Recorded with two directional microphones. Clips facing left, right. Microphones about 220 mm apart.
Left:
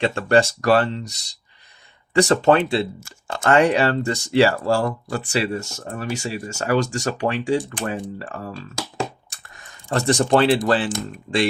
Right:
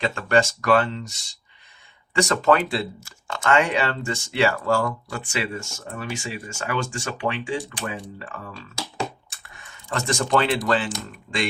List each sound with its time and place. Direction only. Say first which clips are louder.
0.0 s speech: left 3 dB; 35° left (ahead or behind)